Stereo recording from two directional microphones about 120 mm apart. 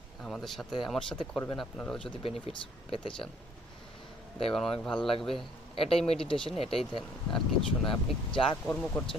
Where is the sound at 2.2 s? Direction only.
55° left (ahead or behind).